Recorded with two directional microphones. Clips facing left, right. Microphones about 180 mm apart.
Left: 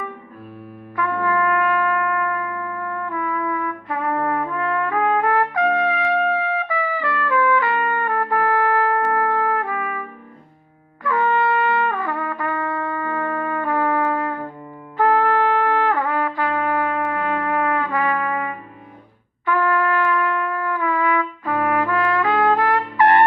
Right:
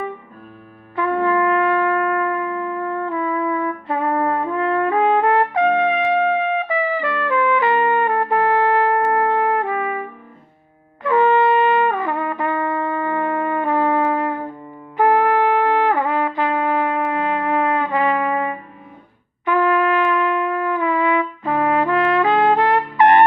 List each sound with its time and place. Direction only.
0.9 s music: 25° right (ahead or behind)
11.0 s trumpet: 20° right (ahead or behind)
14.1 s music: 20° right (ahead or behind)
14.9 s trumpet: 15° right (ahead or behind)